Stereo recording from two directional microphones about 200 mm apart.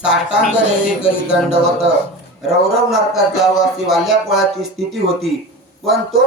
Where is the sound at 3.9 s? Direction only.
Centre (ahead or behind).